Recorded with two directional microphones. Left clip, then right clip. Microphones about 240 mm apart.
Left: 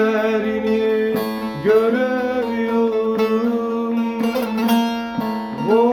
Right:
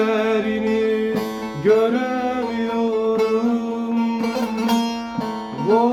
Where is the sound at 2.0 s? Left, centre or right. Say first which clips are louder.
Left 3 dB; centre.